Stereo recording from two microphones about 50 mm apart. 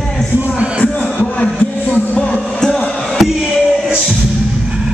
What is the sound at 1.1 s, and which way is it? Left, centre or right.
Music, left.